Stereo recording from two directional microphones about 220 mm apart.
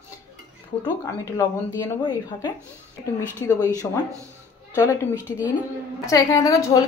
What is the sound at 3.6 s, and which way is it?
Speech, 10° right (ahead or behind).